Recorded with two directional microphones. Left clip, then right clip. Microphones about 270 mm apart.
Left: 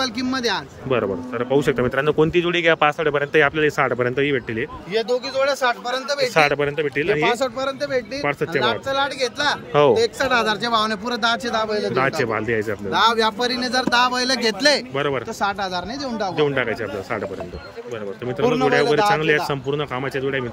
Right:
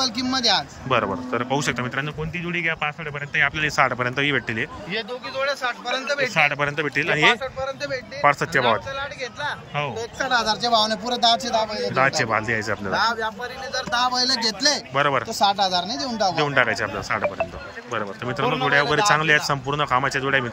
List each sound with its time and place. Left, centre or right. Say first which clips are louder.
0.0 s speech: right 1 dB; centre
4.9 s a man's voice: left 8 dB; left
6.3 s speech: left 4 dB; centre
7.3 s speech: left 5 dB; left
8.2 s speech: right 4 dB; centre
8.6 s a man's voice: left 2 dB; left
9.8 s speech: left 12 dB; left
10.6 s speech: even; centre
12.9 s a man's voice: left 6 dB; left
13.9 s speech: left 1 dB; centre
18.7 s speech: right 1 dB; centre